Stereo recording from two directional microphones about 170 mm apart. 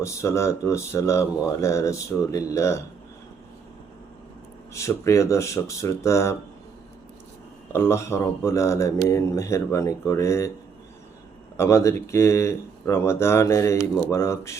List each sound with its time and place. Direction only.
0.0 s speech: 15° left (ahead or behind)
4.7 s speech: 15° left (ahead or behind)
7.7 s speech: 15° left (ahead or behind)
11.5 s speech: 15° left (ahead or behind)